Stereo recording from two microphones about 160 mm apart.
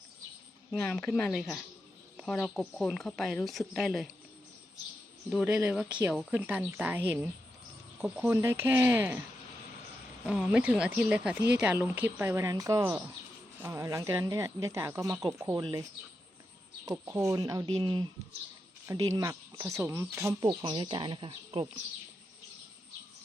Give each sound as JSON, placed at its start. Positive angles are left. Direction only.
{"t": 0.8, "sound": "a woman's voice", "side_deg": 5}
{"t": 5.3, "sound": "a woman's voice", "side_deg": -5}
{"t": 10.2, "sound": "a woman's voice", "side_deg": -5}
{"t": 16.8, "sound": "speech", "side_deg": -20}